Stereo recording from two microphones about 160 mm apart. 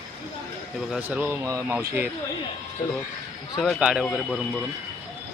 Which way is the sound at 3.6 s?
5° right (ahead or behind).